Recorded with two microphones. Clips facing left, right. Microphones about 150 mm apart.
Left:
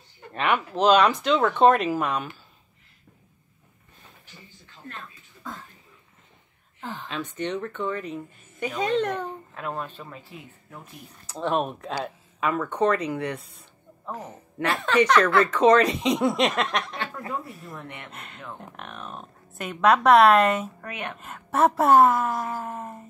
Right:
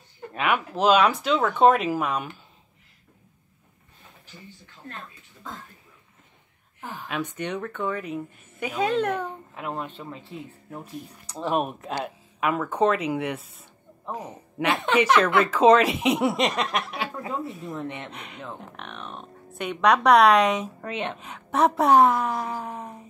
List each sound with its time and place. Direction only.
0.3 s speech: 5° right (ahead or behind)
6.8 s speech: 10° right (ahead or behind)
11.2 s speech: 5° right (ahead or behind)
14.0 s speech: 15° right (ahead or behind)
17.7 s speech: 20° right (ahead or behind)
18.1 s speech: centre (ahead or behind)
20.8 s speech: 25° right (ahead or behind)
21.2 s speech: centre (ahead or behind)